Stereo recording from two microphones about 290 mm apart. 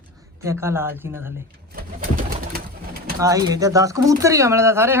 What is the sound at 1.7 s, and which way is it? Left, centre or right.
Pigeon, right.